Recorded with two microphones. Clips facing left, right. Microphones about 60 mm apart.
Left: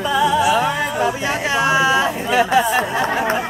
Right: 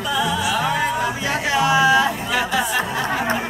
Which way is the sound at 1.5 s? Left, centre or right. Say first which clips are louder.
Right 1 dB; left.